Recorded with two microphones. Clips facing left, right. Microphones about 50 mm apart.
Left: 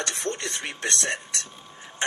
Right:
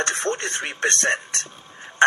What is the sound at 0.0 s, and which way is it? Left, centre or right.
Speech, right.